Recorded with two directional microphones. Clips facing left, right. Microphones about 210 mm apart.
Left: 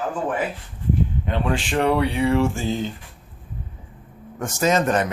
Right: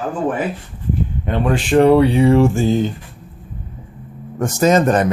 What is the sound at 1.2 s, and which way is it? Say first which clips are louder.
Mantra: right 10 dB; 50° right (ahead or behind).